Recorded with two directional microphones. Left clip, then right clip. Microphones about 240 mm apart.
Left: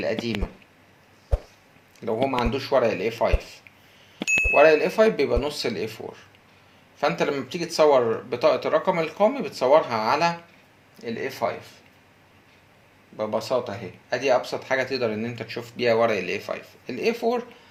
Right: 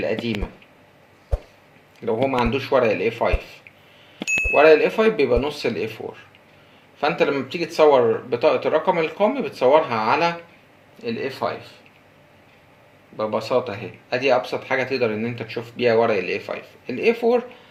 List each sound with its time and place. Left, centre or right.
1.3 s a sound: centre
2.0 s speech: left
4.2 s bicycle bell: centre
4.5 s speech: left
7.0 s speech: left
13.1 s speech: left